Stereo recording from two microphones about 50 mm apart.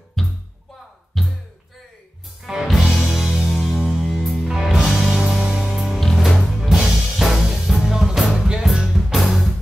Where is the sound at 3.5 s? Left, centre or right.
Centre.